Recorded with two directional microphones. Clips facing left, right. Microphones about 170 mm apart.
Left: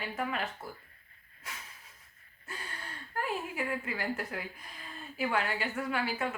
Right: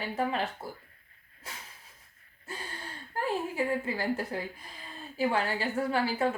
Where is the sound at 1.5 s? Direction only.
30° right (ahead or behind).